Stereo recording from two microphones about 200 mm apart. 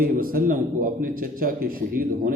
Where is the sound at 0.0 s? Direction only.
45° right (ahead or behind).